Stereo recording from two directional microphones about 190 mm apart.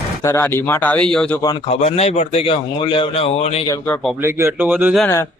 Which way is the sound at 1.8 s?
35° left (ahead or behind).